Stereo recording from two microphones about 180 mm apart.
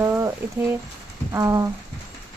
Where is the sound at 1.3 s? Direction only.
20° right (ahead or behind).